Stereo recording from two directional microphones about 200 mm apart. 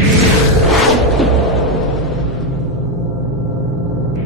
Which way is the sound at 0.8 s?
Centre (ahead or behind).